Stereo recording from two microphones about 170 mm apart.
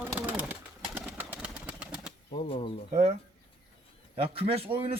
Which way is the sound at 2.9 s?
40° right (ahead or behind).